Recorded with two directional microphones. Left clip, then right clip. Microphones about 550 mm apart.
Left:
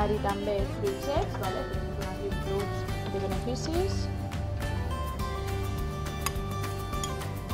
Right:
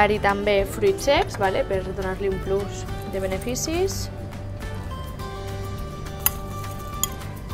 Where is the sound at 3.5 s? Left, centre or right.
Right.